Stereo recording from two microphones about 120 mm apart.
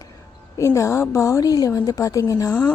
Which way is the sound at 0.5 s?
25° left (ahead or behind).